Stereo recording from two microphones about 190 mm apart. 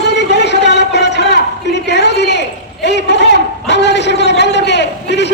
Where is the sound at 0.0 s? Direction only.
65° left (ahead or behind).